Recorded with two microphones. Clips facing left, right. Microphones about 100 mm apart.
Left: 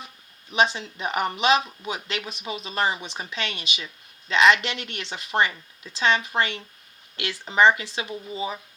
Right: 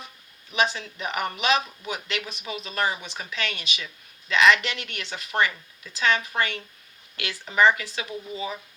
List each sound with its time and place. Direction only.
0.5 s speech: 25° left (ahead or behind)